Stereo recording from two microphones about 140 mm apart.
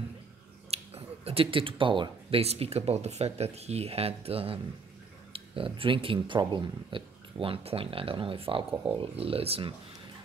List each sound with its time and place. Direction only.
0.7 s speech: 45° right (ahead or behind)